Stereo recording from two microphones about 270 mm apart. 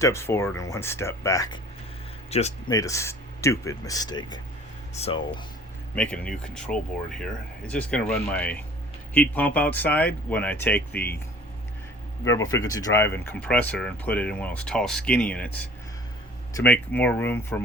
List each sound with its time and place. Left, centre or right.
0.0 s speech: centre
5.9 s speech: centre
7.7 s speech: centre
12.2 s speech: centre